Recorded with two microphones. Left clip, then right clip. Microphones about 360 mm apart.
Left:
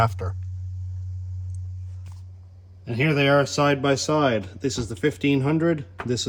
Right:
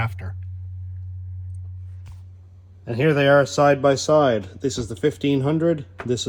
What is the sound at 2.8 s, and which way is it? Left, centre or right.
Speech, centre.